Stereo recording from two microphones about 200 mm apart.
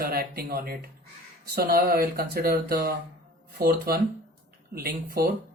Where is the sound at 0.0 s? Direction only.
50° right (ahead or behind).